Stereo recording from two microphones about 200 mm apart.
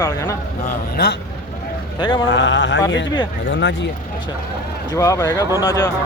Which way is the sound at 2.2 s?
65° left (ahead or behind).